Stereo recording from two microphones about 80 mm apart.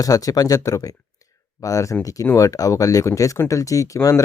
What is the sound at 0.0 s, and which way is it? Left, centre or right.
Speech, left.